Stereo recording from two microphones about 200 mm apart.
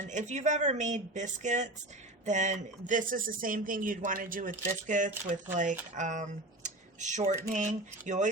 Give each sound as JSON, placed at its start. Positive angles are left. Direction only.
{"t": 0.0, "sound": "speech", "side_deg": -35}